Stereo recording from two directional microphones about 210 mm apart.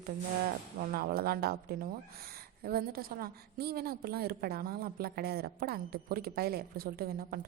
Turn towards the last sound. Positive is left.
turn(degrees=-45)  # may be behind; listen again after turning